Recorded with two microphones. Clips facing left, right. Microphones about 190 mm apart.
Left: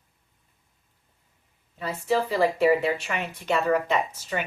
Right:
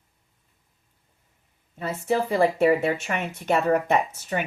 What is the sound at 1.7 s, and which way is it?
Speech, 45° right (ahead or behind).